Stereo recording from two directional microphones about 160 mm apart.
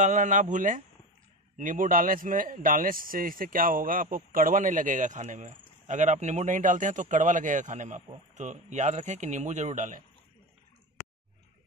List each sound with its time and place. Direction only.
0.0 s speech: 50° right (ahead or behind)